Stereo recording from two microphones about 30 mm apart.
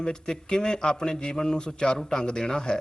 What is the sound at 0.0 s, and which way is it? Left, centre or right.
A man's voice, left.